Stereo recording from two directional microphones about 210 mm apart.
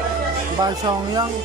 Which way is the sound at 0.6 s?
20° right (ahead or behind).